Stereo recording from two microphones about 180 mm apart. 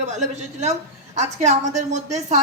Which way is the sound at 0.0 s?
40° right (ahead or behind).